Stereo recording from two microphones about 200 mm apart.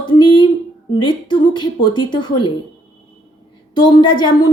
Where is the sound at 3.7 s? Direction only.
20° left (ahead or behind).